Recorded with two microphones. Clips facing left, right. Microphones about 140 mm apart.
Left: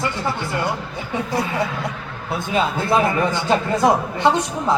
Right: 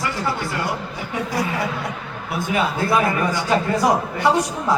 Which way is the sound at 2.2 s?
25° left (ahead or behind).